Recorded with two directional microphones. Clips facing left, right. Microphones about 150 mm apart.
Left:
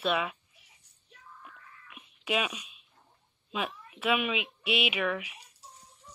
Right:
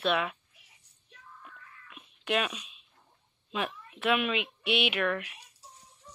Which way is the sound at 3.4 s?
5° left (ahead or behind).